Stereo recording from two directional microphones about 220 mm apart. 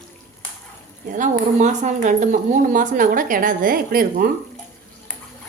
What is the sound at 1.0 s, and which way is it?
Speech, 35° right (ahead or behind).